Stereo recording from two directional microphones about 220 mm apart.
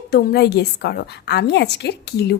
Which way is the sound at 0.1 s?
45° left (ahead or behind).